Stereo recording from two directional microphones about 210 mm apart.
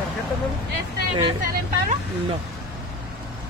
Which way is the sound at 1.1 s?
25° right (ahead or behind).